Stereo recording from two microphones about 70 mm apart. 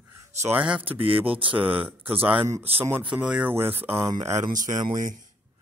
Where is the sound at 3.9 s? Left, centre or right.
Right.